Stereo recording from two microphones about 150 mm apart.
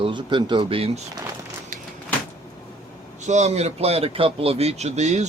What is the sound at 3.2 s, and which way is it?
A man's voice, 50° right (ahead or behind).